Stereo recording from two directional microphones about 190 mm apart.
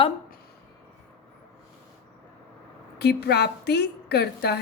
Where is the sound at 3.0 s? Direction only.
60° left (ahead or behind).